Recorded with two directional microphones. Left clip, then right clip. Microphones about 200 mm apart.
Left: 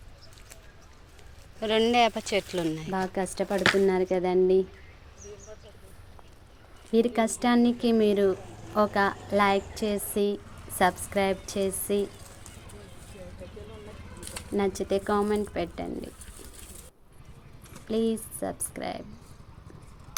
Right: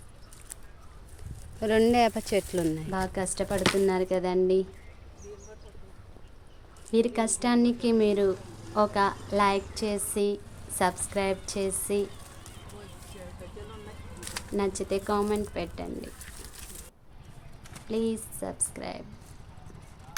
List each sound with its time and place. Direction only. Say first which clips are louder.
1.5 s speech: even; 25° right (ahead or behind)
2.9 s speech: left 1 dB; 5° left (ahead or behind)
6.9 s speech: left 1 dB; 10° left (ahead or behind)
14.3 s speech: left 2 dB; 10° left (ahead or behind)
17.8 s speech: left 2 dB; 10° left (ahead or behind)